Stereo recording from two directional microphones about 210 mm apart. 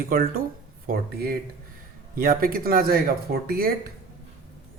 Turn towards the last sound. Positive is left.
turn(degrees=-45)  # may be behind; listen again after turning